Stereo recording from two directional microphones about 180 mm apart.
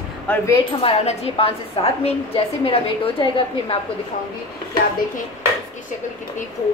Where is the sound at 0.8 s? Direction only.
35° left (ahead or behind).